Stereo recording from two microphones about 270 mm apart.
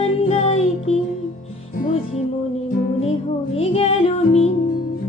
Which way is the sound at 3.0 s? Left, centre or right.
Left.